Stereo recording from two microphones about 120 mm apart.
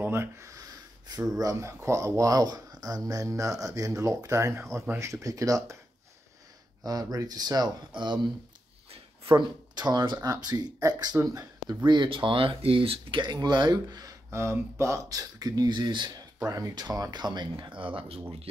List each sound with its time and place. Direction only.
0.0 s speech: 20° right (ahead or behind)
6.8 s speech: 30° right (ahead or behind)
8.9 s a sound: 50° right (ahead or behind)
9.8 s speech: 40° right (ahead or behind)
11.1 s speech: 20° right (ahead or behind)
11.8 s speech: 40° right (ahead or behind)
13.2 s speech: 35° right (ahead or behind)
16.3 s speech: 25° right (ahead or behind); by 18.2 s 50° right (ahead or behind)